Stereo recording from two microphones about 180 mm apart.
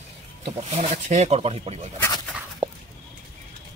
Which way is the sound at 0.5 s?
35° right (ahead or behind).